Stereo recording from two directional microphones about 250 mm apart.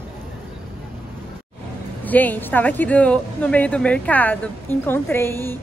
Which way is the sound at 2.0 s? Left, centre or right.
Centre.